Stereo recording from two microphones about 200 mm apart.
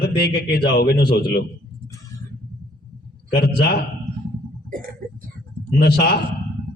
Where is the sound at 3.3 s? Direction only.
50° left (ahead or behind).